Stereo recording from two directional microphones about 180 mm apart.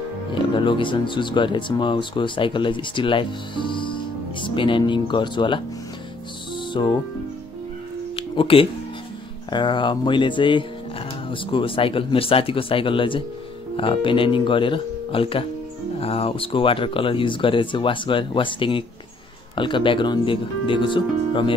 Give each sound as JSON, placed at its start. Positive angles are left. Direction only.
{"t": 0.3, "sound": "speech", "side_deg": 25}
{"t": 6.8, "sound": "speech", "side_deg": 25}
{"t": 8.2, "sound": "music", "side_deg": 30}
{"t": 9.5, "sound": "speech", "side_deg": 25}